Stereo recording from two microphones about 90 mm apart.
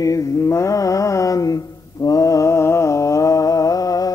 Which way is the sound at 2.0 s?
40° left (ahead or behind).